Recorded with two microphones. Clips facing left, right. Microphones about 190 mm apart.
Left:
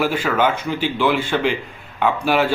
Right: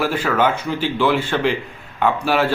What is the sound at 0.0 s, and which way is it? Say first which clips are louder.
Speech: even; 10° left (ahead or behind).